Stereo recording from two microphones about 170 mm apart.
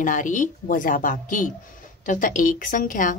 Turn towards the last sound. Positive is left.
turn(degrees=50)  # may be behind; listen again after turning